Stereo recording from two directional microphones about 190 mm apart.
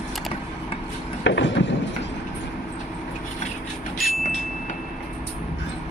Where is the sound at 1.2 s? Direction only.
70° left (ahead or behind).